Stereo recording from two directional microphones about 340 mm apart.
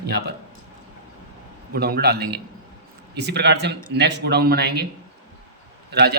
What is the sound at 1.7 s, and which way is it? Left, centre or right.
A man's voice, right.